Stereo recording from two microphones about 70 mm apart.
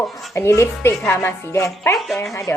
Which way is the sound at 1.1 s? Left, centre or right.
Left.